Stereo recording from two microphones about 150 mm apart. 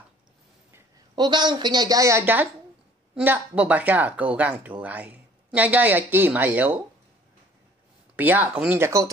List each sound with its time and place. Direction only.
1.1 s a woman's voice: 30° right (ahead or behind); by 6.8 s 10° right (ahead or behind)
8.2 s speech: 10° right (ahead or behind)